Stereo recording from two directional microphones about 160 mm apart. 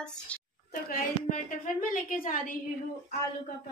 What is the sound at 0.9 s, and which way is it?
A woman's voice, 55° left (ahead or behind).